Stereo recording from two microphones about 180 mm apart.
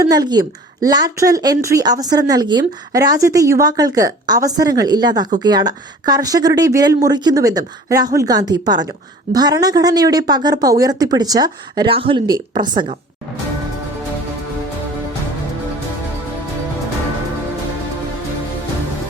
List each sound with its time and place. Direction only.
0.0 s a woman's voice: 20° right (ahead or behind)